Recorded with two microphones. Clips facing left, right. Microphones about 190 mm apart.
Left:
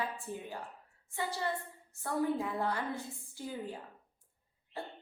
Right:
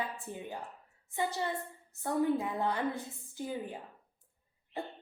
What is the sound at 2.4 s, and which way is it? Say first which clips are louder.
A woman's voice: right 2 dB; 20° right (ahead or behind).